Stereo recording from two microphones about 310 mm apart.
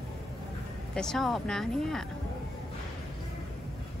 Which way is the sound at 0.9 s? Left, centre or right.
Centre.